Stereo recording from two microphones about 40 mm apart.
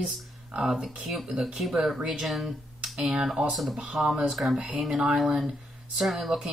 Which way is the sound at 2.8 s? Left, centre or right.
Centre.